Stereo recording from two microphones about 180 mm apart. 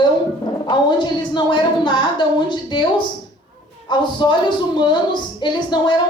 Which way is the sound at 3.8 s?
25° left (ahead or behind).